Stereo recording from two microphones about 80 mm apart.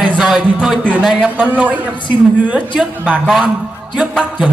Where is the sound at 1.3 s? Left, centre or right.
Centre.